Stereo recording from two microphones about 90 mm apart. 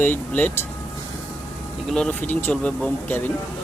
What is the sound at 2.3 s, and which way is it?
Speech, 20° left (ahead or behind).